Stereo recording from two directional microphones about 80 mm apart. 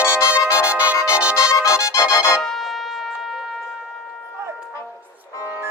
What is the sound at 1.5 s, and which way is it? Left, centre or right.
Music, left.